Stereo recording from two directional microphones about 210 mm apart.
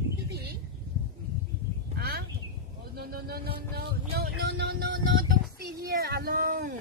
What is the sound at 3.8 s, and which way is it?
Vehicle, 50° right (ahead or behind).